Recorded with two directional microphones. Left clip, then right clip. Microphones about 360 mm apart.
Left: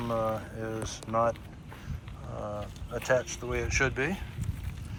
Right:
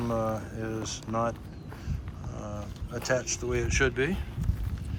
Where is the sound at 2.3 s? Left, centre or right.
Centre.